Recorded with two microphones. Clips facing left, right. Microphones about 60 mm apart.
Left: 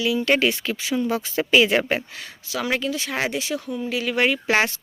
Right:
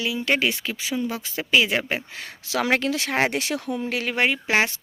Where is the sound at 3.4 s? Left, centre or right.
Right.